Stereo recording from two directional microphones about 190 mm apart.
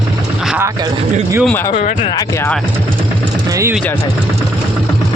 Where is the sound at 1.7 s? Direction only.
35° left (ahead or behind).